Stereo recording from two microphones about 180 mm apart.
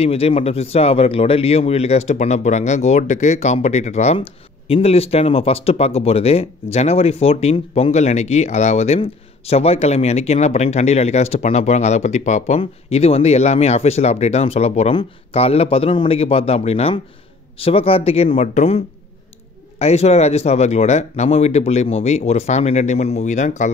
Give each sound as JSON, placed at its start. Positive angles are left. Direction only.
{"t": 0.0, "sound": "speech", "side_deg": 35}